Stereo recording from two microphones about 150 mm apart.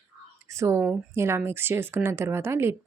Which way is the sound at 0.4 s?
20° right (ahead or behind).